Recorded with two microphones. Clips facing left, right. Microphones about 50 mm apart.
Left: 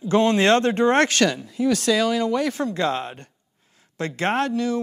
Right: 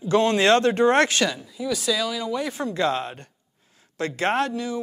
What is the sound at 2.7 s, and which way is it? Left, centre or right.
Speech, left.